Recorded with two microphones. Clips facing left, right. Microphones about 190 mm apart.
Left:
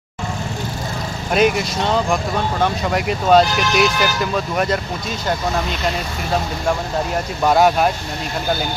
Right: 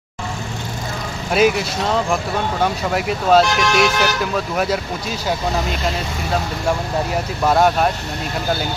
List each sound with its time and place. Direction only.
1.3 s speech: centre (ahead or behind)
3.4 s speech: 65° right (ahead or behind)
4.2 s speech: 5° right (ahead or behind)
7.4 s speech: centre (ahead or behind)